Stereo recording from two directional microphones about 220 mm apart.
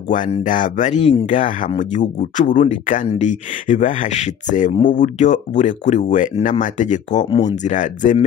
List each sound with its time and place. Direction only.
0.1 s speech: 35° left (ahead or behind)